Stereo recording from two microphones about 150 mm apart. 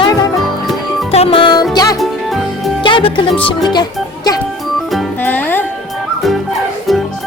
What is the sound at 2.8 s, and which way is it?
Speech, 35° left (ahead or behind).